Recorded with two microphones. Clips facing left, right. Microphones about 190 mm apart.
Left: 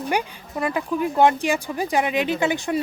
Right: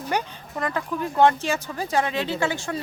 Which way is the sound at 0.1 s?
10° left (ahead or behind).